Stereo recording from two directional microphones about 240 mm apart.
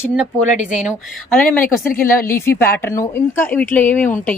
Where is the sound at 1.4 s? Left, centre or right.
Centre.